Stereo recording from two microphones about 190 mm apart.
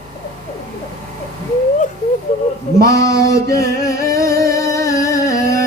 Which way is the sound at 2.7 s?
15° left (ahead or behind).